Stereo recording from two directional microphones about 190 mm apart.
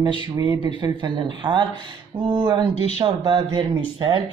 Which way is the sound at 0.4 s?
20° right (ahead or behind).